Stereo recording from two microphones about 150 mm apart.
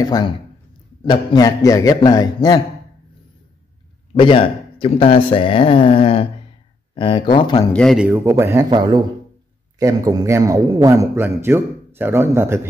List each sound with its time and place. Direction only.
0.0 s a man's voice: 25° left (ahead or behind)
4.1 s speech: 35° left (ahead or behind)
7.7 s speech: 5° left (ahead or behind)
8.0 s a man's voice: 15° right (ahead or behind)